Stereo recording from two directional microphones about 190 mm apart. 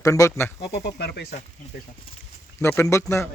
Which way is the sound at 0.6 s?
60° left (ahead or behind).